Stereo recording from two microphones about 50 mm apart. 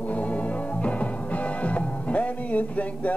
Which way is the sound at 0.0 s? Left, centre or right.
Left.